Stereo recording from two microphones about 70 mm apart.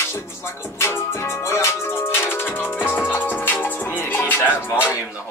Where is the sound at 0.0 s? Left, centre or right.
Left.